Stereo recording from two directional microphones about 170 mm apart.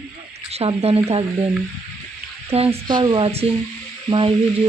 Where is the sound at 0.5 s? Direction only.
35° right (ahead or behind).